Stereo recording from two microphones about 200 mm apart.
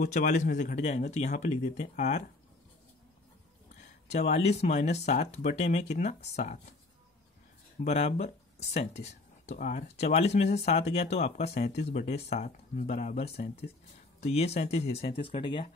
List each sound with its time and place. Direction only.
0.0 s speech: 40° left (ahead or behind)
4.3 s speech: 35° left (ahead or behind)
7.8 s speech: 35° left (ahead or behind)